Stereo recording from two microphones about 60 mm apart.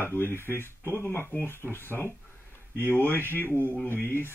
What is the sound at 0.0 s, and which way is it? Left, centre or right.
Speech, left.